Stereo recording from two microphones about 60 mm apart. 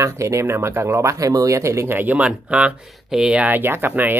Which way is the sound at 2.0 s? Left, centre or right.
Right.